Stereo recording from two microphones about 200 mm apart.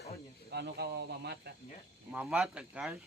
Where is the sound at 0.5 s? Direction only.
55° right (ahead or behind).